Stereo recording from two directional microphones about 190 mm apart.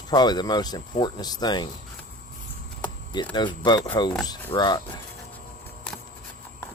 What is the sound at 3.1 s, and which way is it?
Speech, 25° left (ahead or behind).